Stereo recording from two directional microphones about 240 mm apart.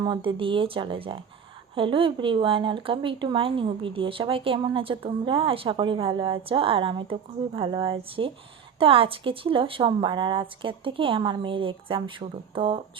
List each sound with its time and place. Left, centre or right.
0.3 s speech: right